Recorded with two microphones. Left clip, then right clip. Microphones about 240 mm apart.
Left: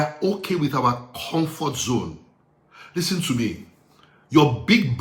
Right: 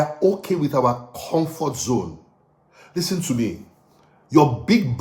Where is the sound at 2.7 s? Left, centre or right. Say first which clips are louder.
Even; centre.